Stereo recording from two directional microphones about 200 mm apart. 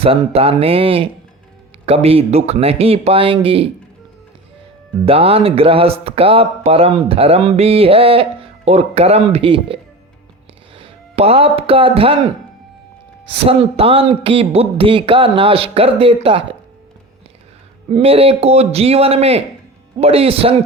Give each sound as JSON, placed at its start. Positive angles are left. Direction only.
{"t": 0.0, "sound": "speech", "side_deg": -30}
{"t": 5.0, "sound": "speech", "side_deg": -30}
{"t": 13.5, "sound": "speech", "side_deg": -30}
{"t": 17.8, "sound": "speech", "side_deg": -30}